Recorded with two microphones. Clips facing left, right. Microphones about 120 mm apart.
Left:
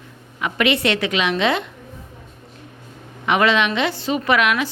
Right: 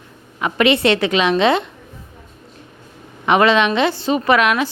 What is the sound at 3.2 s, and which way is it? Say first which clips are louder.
A woman's voice: right 4 dB; 30° right (ahead or behind).